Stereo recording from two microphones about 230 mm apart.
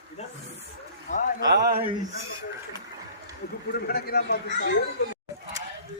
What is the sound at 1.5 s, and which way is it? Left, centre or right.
Speech, right.